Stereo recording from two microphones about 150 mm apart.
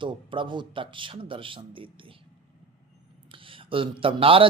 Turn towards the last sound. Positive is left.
turn(degrees=-35)  # may be behind; listen again after turning